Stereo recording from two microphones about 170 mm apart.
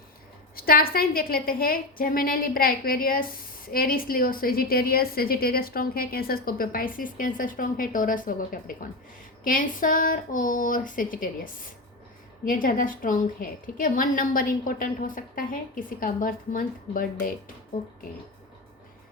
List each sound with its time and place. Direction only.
0.5 s a woman's voice: 60° left (ahead or behind)